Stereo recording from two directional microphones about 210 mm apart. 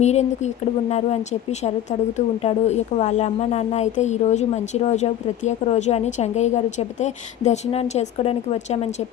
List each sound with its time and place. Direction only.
0.0 s a woman's voice: 35° left (ahead or behind)